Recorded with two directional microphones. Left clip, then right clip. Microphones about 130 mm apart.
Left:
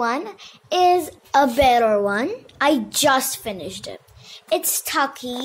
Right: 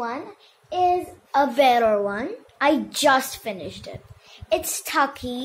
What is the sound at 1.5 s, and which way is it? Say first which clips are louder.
Speech: right 1 dB; 50° left (ahead or behind).